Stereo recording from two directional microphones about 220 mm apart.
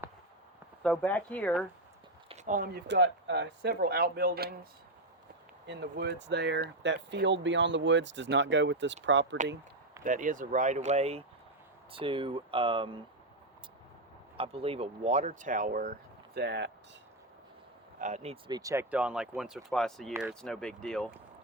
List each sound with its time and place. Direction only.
0.8 s speech: 5° left (ahead or behind)
2.3 s speech: 35° right (ahead or behind)
5.6 s speech: 50° right (ahead or behind)
10.0 s speech: 35° right (ahead or behind)
14.3 s speech: 25° right (ahead or behind); by 16.7 s 50° right (ahead or behind)
18.0 s speech: 30° right (ahead or behind); by 21.1 s 5° left (ahead or behind)